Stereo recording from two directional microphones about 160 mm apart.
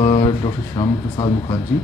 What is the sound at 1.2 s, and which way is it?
Speech, 20° left (ahead or behind).